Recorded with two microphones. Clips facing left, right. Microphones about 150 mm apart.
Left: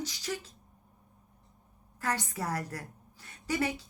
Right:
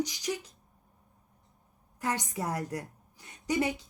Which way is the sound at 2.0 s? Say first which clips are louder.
Right 1 dB; 20° right (ahead or behind).